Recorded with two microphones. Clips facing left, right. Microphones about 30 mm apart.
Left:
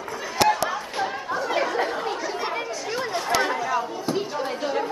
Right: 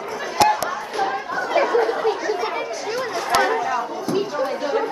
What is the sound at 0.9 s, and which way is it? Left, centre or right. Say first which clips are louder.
Chatter: right 4 dB; centre.